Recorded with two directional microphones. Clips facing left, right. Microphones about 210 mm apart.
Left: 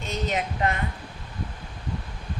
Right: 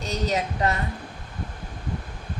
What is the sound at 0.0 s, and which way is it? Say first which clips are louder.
Speech: right 2 dB; 40° right (ahead or behind).